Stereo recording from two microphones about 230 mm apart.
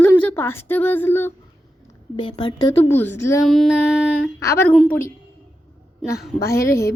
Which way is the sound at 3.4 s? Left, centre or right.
Centre.